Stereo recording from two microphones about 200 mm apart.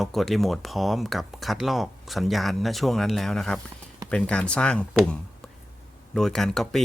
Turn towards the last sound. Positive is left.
turn(degrees=0)  # may be behind; listen again after turning